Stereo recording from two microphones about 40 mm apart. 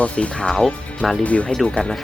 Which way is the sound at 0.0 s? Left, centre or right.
Left.